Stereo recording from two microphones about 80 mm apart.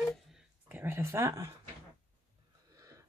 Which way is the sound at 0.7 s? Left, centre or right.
Right.